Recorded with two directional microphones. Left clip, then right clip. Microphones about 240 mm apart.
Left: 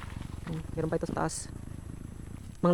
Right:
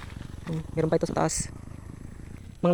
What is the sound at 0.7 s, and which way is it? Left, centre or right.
Speech, centre.